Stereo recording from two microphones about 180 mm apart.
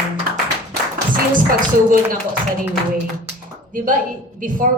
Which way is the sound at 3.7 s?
50° right (ahead or behind).